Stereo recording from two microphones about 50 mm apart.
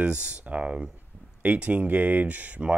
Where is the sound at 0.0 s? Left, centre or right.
Right.